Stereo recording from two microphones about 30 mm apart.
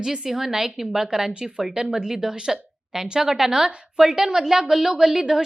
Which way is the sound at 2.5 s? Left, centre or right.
Centre.